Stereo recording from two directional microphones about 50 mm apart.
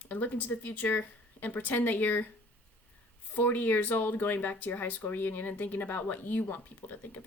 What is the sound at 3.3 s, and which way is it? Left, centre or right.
Speech, left.